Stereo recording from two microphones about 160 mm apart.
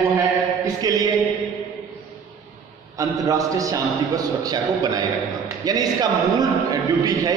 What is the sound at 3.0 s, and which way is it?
A man's voice, 20° right (ahead or behind).